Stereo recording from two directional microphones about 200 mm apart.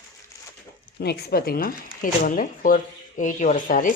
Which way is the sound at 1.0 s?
50° left (ahead or behind).